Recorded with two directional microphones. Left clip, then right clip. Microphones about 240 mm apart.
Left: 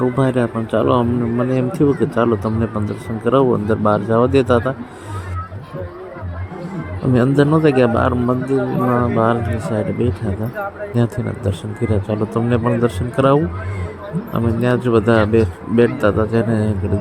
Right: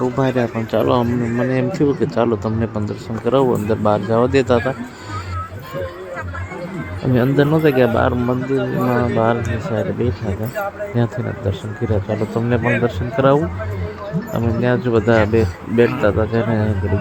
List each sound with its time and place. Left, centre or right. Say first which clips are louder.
0.0 s a man's voice: left 1 dB; centre
7.1 s speech: left 1 dB; left